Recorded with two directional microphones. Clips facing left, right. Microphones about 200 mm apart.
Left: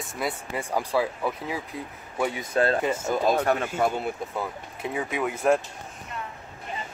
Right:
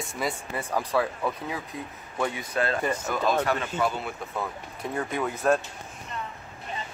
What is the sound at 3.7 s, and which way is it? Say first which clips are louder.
Speech: left 3 dB; 45° left (ahead or behind).